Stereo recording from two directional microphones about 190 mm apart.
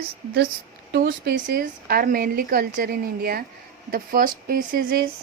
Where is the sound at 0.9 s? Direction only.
55° right (ahead or behind).